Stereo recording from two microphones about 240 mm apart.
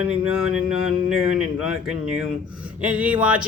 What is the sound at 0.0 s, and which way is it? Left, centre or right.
Speech, centre.